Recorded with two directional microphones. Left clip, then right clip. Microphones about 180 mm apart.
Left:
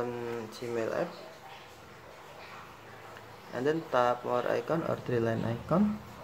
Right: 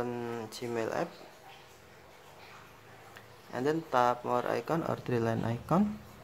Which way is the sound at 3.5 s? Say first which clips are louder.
Even; 25° right (ahead or behind).